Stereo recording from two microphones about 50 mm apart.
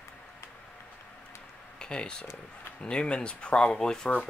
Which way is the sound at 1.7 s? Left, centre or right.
Centre.